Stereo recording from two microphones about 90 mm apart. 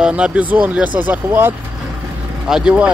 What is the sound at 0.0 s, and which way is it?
Speech, 10° right (ahead or behind).